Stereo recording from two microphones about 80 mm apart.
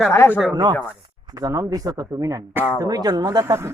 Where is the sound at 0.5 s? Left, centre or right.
Right.